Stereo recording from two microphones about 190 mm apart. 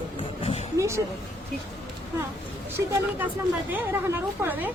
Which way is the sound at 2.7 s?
10° right (ahead or behind).